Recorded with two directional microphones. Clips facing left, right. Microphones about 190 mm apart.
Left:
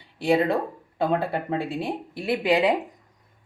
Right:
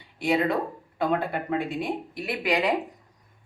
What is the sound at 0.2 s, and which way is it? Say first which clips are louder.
Speech: left 3 dB; 30° left (ahead or behind).